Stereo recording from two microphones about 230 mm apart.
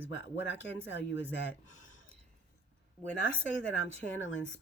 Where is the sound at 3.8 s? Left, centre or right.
Left.